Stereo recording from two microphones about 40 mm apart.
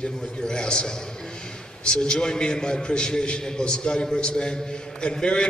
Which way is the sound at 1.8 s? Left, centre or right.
Left.